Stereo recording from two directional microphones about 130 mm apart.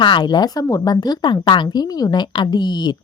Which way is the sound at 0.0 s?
35° left (ahead or behind).